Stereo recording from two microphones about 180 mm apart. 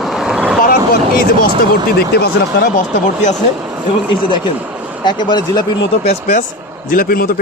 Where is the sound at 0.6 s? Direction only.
55° left (ahead or behind).